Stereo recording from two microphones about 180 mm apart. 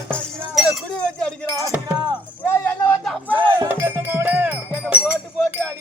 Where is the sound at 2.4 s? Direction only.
10° left (ahead or behind).